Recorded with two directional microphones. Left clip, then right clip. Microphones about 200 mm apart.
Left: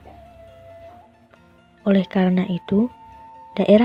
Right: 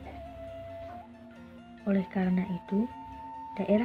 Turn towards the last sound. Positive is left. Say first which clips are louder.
# left 13 dB
turn(degrees=45)  # may be behind; listen again after turning